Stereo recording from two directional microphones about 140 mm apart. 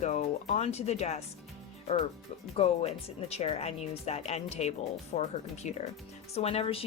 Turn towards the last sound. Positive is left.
turn(degrees=45)  # may be behind; listen again after turning